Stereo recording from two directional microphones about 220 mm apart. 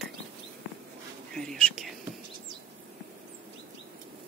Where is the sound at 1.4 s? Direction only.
5° left (ahead or behind).